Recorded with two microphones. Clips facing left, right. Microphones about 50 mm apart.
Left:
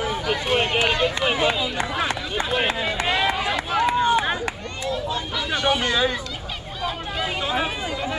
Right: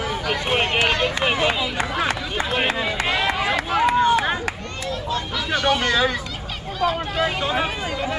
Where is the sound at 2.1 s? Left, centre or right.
Right.